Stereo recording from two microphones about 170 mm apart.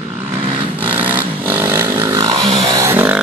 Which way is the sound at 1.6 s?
15° right (ahead or behind).